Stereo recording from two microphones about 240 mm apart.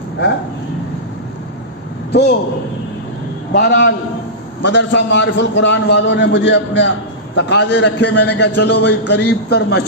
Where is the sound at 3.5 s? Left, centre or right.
Left.